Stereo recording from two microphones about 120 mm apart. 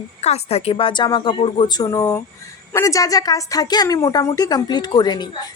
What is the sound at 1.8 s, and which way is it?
A woman's voice, 30° left (ahead or behind).